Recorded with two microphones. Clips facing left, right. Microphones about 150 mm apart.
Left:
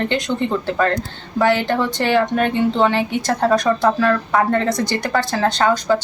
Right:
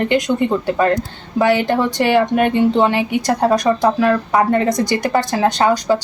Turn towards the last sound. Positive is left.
turn(degrees=-15)  # may be behind; listen again after turning